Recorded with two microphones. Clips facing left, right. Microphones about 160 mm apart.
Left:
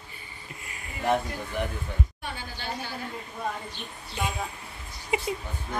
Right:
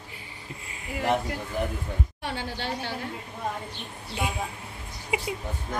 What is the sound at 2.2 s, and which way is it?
Speech, 80° right.